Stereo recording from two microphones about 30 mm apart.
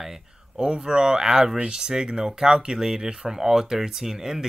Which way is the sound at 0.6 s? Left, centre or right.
Right.